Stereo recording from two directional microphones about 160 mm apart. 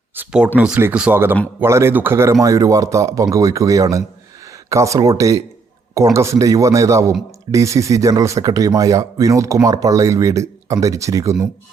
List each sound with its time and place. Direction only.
0.2 s speech: 5° right (ahead or behind)